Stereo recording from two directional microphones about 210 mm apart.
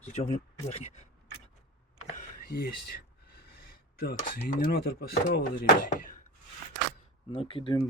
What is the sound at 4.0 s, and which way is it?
Speech, 45° left (ahead or behind).